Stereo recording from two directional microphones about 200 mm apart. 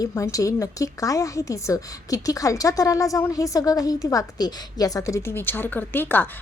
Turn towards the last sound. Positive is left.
turn(degrees=10)  # may be behind; listen again after turning